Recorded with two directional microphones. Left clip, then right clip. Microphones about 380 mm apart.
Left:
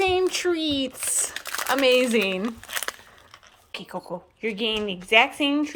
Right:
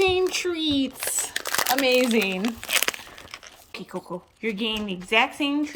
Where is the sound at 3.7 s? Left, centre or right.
Centre.